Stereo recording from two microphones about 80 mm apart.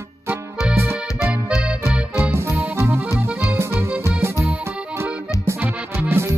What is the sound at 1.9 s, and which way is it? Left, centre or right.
Music, centre.